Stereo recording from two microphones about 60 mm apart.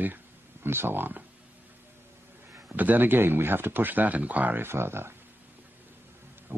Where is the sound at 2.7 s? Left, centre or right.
Right.